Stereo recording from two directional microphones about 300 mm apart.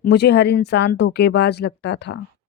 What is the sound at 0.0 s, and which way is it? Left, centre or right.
Speech, left.